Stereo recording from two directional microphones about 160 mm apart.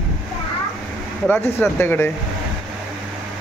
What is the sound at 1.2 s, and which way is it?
Speech, 10° left (ahead or behind).